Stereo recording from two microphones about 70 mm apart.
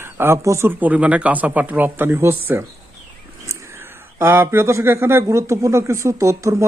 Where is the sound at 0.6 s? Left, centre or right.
Right.